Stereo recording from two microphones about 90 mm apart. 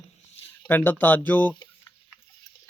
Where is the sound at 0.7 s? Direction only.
20° left (ahead or behind).